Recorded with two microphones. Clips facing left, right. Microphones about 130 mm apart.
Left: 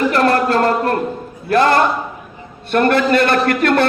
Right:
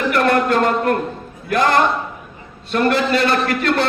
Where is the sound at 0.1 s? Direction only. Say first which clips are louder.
Left 1 dB; 30° left (ahead or behind).